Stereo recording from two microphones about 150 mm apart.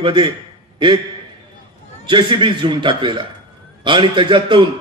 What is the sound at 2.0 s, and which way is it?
A man's voice, 30° right (ahead or behind).